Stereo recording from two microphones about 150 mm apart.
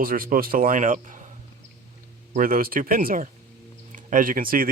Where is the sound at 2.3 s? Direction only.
70° right (ahead or behind).